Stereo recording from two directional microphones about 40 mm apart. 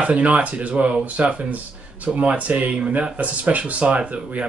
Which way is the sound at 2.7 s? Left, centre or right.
Right.